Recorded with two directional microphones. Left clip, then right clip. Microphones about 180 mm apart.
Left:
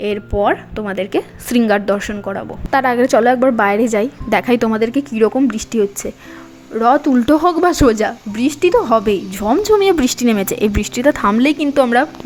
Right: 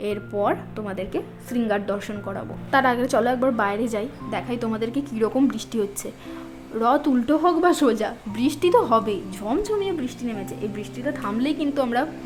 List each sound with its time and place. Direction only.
0.0 s a woman's voice: 25° left (ahead or behind)
4.3 s a woman's voice: 50° left (ahead or behind); by 7.2 s 25° left (ahead or behind)
7.3 s speech: 40° left (ahead or behind)